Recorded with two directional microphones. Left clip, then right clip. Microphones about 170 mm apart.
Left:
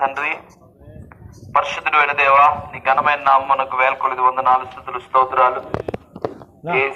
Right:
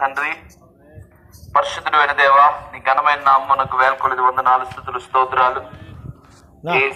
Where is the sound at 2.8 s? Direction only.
Centre (ahead or behind).